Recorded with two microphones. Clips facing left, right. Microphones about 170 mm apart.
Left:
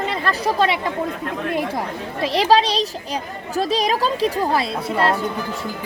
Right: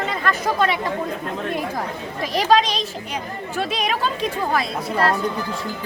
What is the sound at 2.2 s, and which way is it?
Speech, 30° left (ahead or behind).